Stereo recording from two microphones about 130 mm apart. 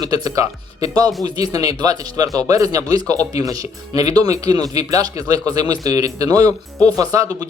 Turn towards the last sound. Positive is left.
turn(degrees=-30)  # may be behind; listen again after turning